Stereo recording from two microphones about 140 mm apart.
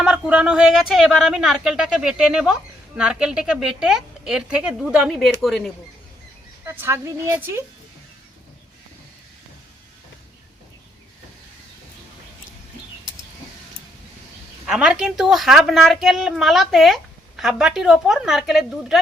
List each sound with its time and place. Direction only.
0.0 s speech: 5° right (ahead or behind)
6.7 s a woman's voice: 20° right (ahead or behind)
14.7 s speech: 5° right (ahead or behind)